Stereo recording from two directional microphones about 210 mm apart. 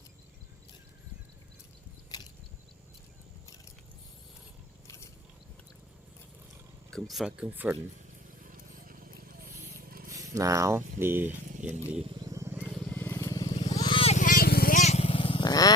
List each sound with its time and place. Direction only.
6.9 s speech: centre (ahead or behind)
8.4 s a sound: 40° right (ahead or behind)
10.1 s speech: 15° right (ahead or behind)
12.0 s vehicle: 20° right (ahead or behind); by 15.7 s 20° left (ahead or behind)